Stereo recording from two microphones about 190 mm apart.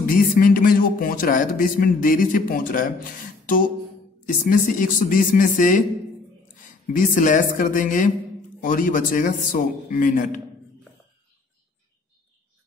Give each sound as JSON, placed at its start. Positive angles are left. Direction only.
{"t": 0.0, "sound": "speech", "side_deg": 50}
{"t": 6.9, "sound": "speech", "side_deg": 45}